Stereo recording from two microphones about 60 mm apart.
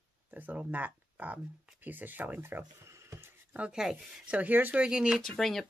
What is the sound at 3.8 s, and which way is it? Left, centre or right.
Speech, centre.